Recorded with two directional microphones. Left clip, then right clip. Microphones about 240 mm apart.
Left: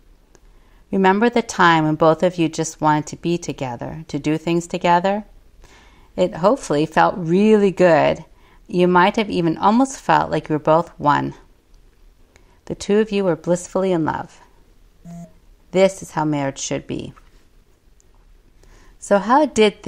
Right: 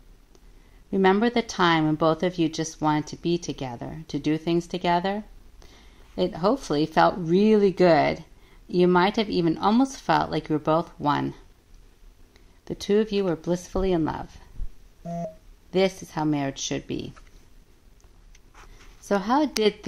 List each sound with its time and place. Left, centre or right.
0.8 s speech: left
15.7 s speech: left
18.9 s speech: left